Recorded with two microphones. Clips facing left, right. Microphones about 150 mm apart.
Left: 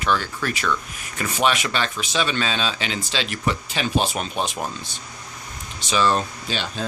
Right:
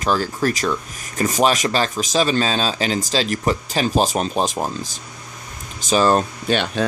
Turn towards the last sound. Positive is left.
turn(degrees=-60)  # may be behind; listen again after turning